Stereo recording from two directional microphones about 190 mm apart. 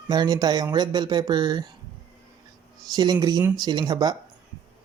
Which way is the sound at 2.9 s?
20° right (ahead or behind).